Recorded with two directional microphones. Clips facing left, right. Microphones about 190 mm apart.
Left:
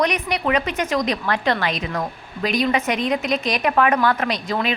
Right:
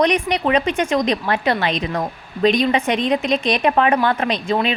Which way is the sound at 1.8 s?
30° right (ahead or behind).